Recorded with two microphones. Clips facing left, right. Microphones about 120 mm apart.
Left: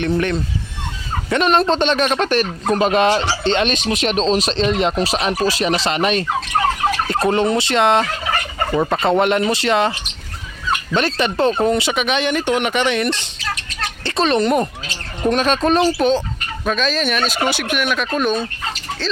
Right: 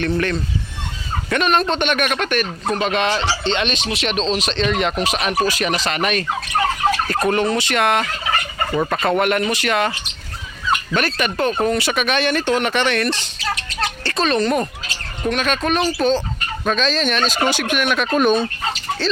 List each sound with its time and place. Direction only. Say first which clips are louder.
0.2 s speech: left 1 dB; 20° left (ahead or behind)
10.9 s speech: left 6 dB; 25° left (ahead or behind)
15.3 s speech: left 4 dB; 35° left (ahead or behind)
16.6 s turkey: even; 5° left (ahead or behind)